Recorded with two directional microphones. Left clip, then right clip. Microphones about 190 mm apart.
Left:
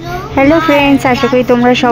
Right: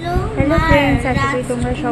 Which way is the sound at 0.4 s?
35° left (ahead or behind).